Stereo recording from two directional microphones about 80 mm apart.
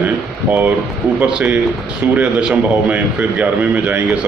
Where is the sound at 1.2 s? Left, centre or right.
Centre.